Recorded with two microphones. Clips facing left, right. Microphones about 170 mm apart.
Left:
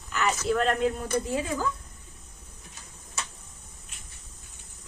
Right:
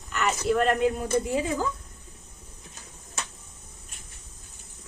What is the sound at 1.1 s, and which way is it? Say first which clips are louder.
Speech: right 3 dB; 15° right (ahead or behind).